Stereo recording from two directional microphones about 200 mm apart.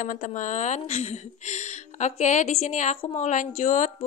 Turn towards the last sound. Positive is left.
turn(degrees=35)  # may be behind; listen again after turning